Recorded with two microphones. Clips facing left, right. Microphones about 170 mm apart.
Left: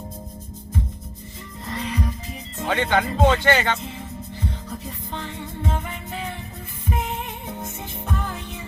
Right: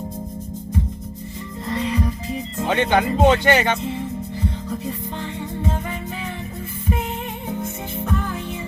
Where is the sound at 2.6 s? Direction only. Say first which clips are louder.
Right 3 dB; 20° right (ahead or behind).